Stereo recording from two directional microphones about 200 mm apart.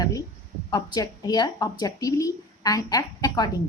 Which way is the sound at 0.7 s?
20° left (ahead or behind).